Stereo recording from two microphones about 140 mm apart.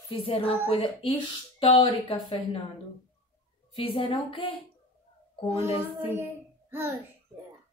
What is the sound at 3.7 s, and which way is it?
Speech, 40° left (ahead or behind).